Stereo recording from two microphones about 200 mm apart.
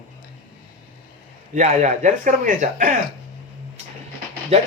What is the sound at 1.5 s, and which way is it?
A man's voice, 35° right (ahead or behind).